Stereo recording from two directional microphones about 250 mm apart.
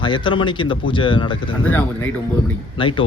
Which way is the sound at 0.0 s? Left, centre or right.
Centre.